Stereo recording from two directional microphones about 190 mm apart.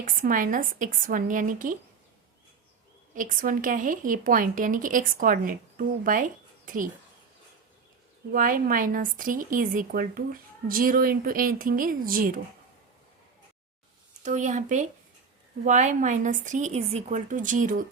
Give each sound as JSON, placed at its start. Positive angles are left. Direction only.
{"t": 0.0, "sound": "a woman's voice", "side_deg": -45}
{"t": 3.2, "sound": "a woman's voice", "side_deg": -45}
{"t": 8.3, "sound": "a woman's voice", "side_deg": -50}
{"t": 14.2, "sound": "a woman's voice", "side_deg": -40}